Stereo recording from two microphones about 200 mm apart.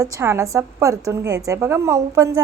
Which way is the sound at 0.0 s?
15° right (ahead or behind).